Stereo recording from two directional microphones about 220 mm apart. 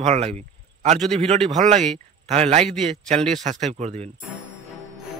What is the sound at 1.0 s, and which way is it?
Speech, centre (ahead or behind).